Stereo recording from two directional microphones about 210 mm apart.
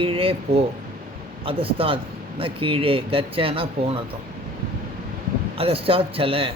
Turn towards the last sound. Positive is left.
turn(degrees=-25)  # may be behind; listen again after turning